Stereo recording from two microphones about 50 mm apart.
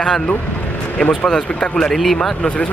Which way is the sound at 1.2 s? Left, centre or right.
Centre.